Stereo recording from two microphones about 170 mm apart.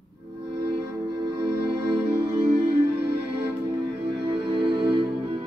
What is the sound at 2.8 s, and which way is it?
Music, 75° right (ahead or behind).